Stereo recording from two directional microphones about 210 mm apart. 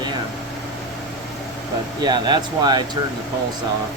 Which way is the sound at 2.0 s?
20° right (ahead or behind).